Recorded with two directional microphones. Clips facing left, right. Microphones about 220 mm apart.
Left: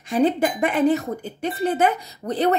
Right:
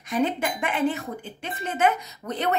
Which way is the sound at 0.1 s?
35° left (ahead or behind).